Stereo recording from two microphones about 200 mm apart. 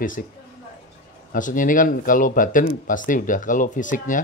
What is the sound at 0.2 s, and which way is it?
A woman's voice, 45° left (ahead or behind).